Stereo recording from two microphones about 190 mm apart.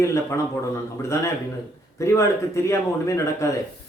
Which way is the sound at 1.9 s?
15° left (ahead or behind).